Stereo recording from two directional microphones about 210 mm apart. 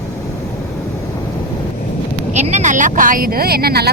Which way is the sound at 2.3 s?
35° right (ahead or behind).